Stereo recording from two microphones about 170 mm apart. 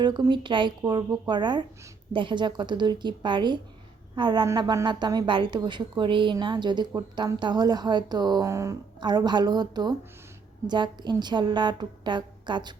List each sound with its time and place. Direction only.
0.0 s a woman's voice: 25° right (ahead or behind)